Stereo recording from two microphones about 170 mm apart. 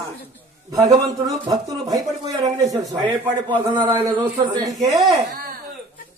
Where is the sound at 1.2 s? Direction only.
20° right (ahead or behind).